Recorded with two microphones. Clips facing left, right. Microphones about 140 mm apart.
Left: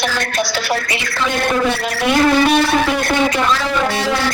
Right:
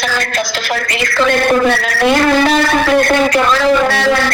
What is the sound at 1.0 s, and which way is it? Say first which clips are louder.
Speech: right 6 dB; 90° right.